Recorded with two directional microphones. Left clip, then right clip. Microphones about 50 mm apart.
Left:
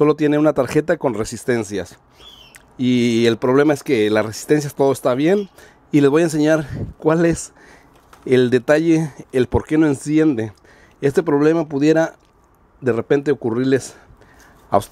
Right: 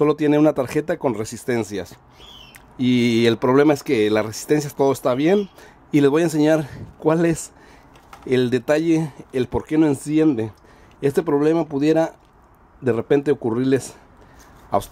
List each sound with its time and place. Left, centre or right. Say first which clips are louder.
0.0 s speech: left 2 dB; left
8.3 s speech: left 4 dB; left
9.8 s speech: left 1 dB; left
14.7 s speech: left 4 dB; left